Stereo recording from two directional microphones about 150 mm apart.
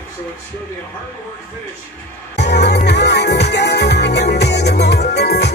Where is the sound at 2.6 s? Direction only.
90° left.